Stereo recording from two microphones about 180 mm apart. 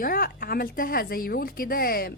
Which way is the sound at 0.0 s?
50° left (ahead or behind).